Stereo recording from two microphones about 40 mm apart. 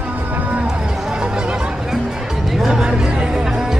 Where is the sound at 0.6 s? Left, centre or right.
Centre.